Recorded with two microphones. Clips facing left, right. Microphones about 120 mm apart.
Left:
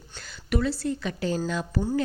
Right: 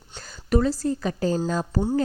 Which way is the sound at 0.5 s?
40° right (ahead or behind).